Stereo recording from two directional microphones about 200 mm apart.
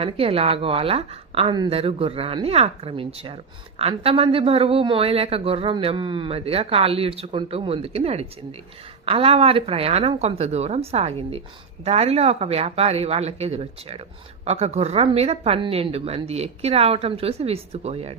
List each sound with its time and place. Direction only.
0.0 s a woman's voice: 30° right (ahead or behind)